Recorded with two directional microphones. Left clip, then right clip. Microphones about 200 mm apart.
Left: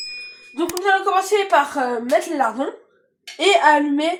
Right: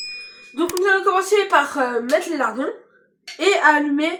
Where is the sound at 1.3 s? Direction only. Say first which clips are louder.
Even; 15° left (ahead or behind).